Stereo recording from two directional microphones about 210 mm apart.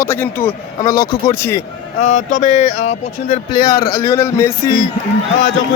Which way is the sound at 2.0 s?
35° left (ahead or behind).